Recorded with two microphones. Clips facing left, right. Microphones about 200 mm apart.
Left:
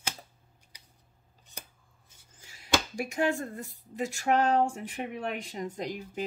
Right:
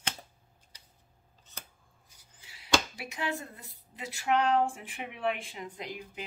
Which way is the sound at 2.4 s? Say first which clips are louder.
Even; 45° left (ahead or behind).